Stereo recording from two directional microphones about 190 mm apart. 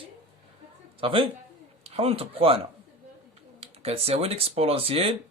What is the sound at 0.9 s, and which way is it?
A man's voice, 30° right (ahead or behind).